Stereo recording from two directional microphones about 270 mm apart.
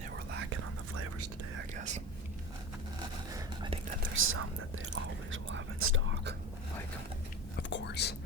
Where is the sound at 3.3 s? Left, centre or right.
Centre.